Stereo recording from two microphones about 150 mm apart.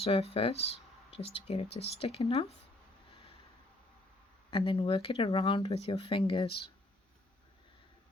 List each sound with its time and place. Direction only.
0.0 s speech: 40° left (ahead or behind)
4.5 s speech: 35° left (ahead or behind)